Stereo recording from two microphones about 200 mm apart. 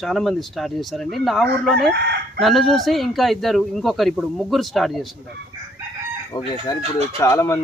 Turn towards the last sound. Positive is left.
turn(degrees=15)  # may be behind; listen again after turning